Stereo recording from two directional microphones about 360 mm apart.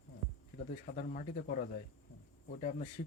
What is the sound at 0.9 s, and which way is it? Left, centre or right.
Speech, left.